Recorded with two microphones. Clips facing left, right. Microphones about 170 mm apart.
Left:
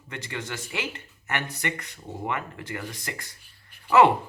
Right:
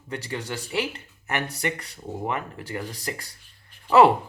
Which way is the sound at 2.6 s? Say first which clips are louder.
Right 3 dB; 35° right (ahead or behind).